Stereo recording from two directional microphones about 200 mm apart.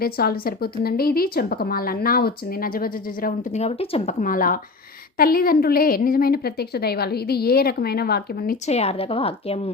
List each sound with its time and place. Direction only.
0.0 s speech: 50° left (ahead or behind)
3.6 s speech: 30° left (ahead or behind)
4.2 s speech: 45° left (ahead or behind)
8.6 s a woman's voice: 30° left (ahead or behind)